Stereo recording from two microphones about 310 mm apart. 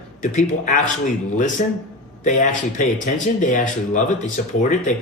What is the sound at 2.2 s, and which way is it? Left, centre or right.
Speech, left.